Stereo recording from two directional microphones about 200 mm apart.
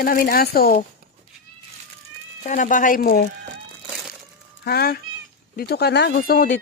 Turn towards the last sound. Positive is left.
turn(degrees=45)  # may be behind; listen again after turning